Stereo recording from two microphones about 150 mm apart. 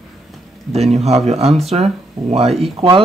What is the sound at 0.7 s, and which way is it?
Speech, 45° right (ahead or behind).